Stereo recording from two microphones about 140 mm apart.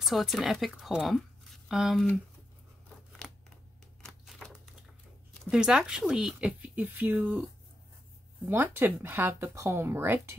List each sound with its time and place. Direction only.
0.0 s speech: centre (ahead or behind)
4.0 s a sound: centre (ahead or behind)
5.4 s speech: 5° right (ahead or behind)
8.5 s speech: 15° right (ahead or behind)